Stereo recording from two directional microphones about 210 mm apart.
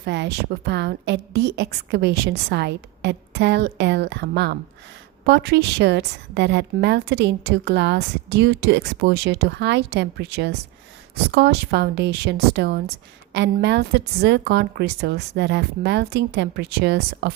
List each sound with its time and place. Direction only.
0.0 s a woman's voice: 55° right (ahead or behind)